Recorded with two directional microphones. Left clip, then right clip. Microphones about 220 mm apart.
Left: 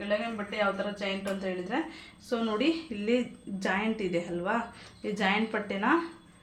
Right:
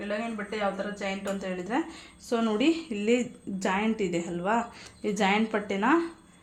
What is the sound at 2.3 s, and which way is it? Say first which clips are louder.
A woman's voice: right 3 dB; 35° right (ahead or behind).